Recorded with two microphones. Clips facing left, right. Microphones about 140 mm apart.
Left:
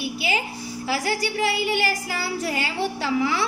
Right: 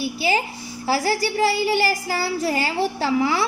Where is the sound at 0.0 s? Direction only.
35° right (ahead or behind).